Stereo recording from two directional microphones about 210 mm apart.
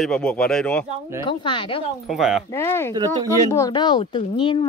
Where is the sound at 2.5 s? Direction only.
10° left (ahead or behind).